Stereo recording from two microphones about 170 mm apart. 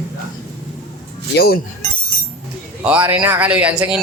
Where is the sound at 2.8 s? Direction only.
10° right (ahead or behind).